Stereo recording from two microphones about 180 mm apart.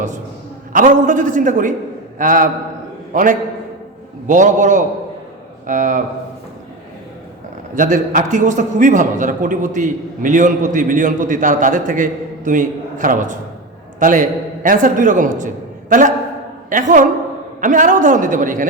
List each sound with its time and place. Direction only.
0.7 s a man's voice: 50° right (ahead or behind)
7.8 s a man's voice: 45° right (ahead or behind)